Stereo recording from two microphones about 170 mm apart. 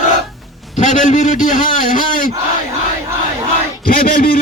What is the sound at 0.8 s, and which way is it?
A man's voice, 45° left (ahead or behind).